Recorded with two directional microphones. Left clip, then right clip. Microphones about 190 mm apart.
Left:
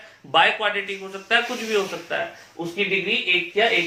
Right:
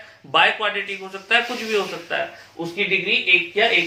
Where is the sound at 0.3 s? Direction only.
15° left (ahead or behind).